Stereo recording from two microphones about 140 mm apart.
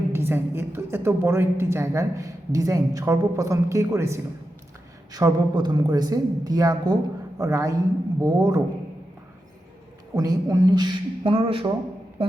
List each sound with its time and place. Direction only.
0.1 s a woman's voice: 15° right (ahead or behind)
10.2 s a man's voice: 25° right (ahead or behind); by 11.7 s 40° right (ahead or behind)